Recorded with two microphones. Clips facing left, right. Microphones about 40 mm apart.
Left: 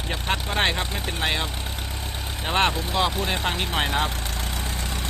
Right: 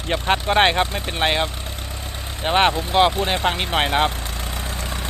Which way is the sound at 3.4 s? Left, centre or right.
Right.